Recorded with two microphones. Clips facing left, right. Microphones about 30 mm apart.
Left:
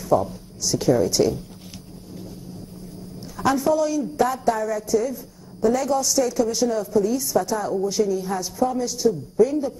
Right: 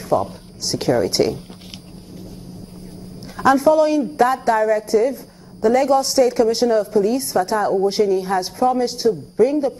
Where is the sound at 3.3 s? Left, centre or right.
Right.